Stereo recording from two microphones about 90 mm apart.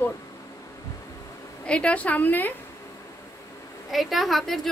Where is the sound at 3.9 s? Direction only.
Centre (ahead or behind).